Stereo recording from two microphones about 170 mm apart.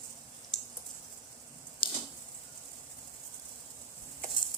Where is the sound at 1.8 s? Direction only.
30° left (ahead or behind).